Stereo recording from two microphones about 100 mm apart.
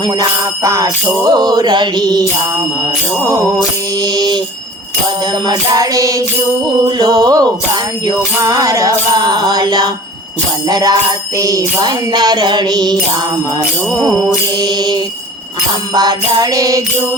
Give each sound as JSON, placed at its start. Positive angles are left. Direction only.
{"t": 0.0, "sound": "music", "side_deg": -40}
{"t": 4.0, "sound": "music", "side_deg": -45}
{"t": 5.5, "sound": "music", "side_deg": -35}
{"t": 14.6, "sound": "music", "side_deg": -45}